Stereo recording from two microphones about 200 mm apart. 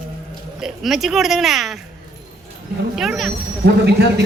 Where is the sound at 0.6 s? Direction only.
Centre (ahead or behind).